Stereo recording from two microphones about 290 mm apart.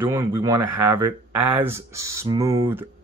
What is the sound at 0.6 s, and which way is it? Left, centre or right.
Speech, right.